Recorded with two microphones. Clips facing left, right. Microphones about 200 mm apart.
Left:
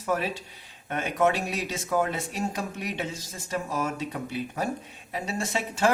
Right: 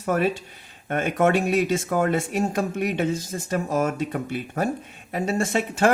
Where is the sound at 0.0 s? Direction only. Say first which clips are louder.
Right 6 dB; 55° right (ahead or behind).